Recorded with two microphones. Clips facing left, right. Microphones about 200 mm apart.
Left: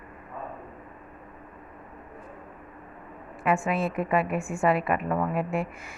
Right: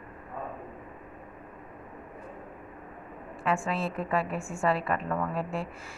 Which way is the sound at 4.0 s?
15° left (ahead or behind).